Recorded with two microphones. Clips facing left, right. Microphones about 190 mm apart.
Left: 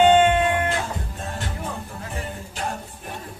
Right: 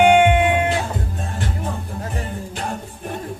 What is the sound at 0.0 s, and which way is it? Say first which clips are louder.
Music: right 2 dB; 15° right (ahead or behind).